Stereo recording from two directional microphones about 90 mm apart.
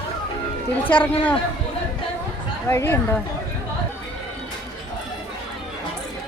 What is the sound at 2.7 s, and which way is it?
Speech, 30° left (ahead or behind).